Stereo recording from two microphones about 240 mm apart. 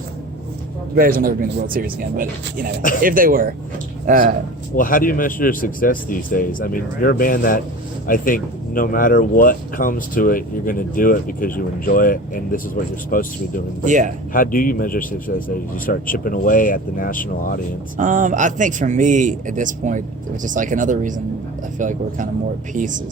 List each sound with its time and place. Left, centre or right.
0.9 s a man's voice: right
4.8 s speech: left
13.8 s a man's voice: right
14.3 s speech: left
17.9 s a man's voice: right